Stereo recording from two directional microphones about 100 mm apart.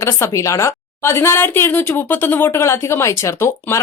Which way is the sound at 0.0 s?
30° left (ahead or behind).